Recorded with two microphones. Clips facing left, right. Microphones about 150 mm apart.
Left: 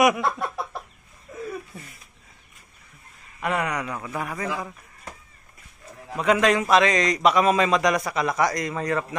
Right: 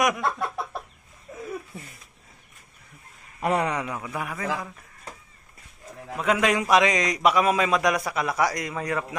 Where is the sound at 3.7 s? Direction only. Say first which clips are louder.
Even; 20° right (ahead or behind).